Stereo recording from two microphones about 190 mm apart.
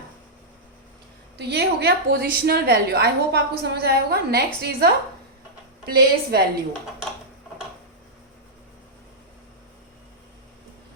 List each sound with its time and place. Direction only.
1.4 s a woman's voice: 60° right (ahead or behind)